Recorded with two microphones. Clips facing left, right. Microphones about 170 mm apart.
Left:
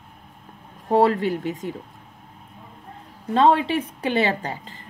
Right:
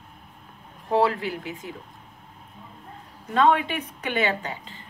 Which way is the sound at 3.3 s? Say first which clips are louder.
Left 3 dB; 30° left (ahead or behind).